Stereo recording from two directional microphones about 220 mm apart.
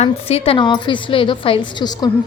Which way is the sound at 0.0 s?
25° left (ahead or behind).